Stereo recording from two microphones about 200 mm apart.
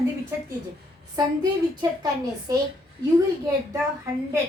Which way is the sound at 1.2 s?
20° right (ahead or behind).